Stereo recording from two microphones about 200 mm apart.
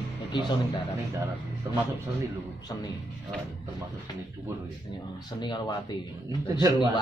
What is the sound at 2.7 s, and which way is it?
Speech, 15° left (ahead or behind).